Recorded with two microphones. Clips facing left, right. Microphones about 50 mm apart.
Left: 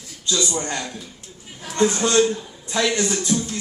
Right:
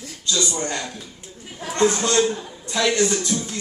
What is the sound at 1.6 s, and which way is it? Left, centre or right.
Speech, right.